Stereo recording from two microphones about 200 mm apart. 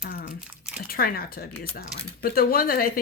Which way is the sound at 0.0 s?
45° left (ahead or behind).